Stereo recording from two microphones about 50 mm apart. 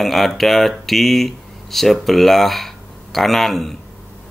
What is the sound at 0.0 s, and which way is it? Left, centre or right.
Speech, centre.